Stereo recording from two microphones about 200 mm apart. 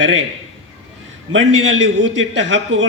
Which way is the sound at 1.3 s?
70° right (ahead or behind).